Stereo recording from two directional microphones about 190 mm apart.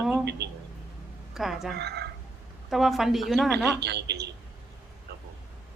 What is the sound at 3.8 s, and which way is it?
Speech, 60° right (ahead or behind).